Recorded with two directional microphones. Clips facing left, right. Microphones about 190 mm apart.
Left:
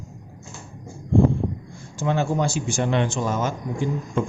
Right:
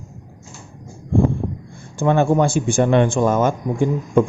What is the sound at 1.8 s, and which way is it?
A man's voice, 55° right (ahead or behind).